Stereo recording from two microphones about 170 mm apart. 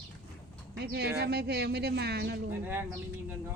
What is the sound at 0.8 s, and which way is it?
Speech, 75° right (ahead or behind).